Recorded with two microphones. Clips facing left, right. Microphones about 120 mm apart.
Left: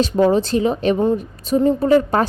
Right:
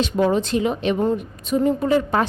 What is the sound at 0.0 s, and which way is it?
A woman's voice, 35° left (ahead or behind).